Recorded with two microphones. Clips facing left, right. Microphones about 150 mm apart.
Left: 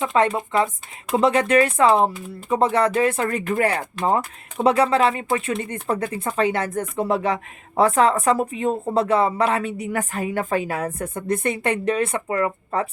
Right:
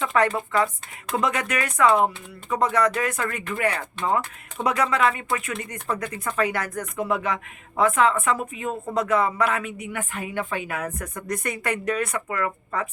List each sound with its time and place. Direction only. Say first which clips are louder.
0.0 s speech: left 2 dB; 25° left (ahead or behind)